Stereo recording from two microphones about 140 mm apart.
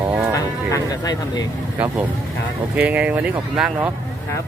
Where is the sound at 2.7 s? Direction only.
10° right (ahead or behind).